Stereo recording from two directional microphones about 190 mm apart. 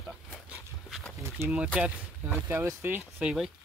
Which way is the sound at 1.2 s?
10° right (ahead or behind).